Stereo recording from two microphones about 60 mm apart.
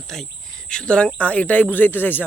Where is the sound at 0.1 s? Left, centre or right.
Centre.